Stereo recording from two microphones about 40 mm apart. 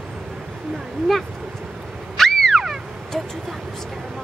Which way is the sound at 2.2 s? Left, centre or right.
Centre.